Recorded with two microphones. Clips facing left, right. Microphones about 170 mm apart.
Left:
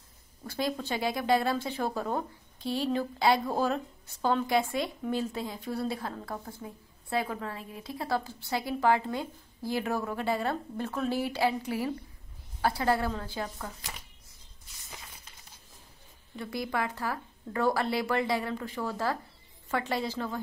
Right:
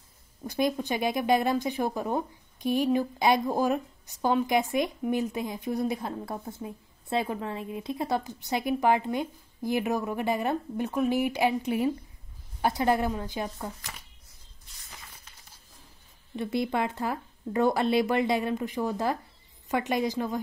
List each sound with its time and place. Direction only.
0.4 s a woman's voice: 20° right (ahead or behind)
16.3 s a woman's voice: 25° right (ahead or behind)